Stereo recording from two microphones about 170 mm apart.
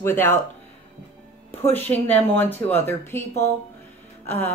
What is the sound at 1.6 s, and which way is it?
Speech, 10° left (ahead or behind).